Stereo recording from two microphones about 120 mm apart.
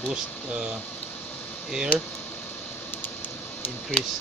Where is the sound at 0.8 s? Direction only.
15° left (ahead or behind).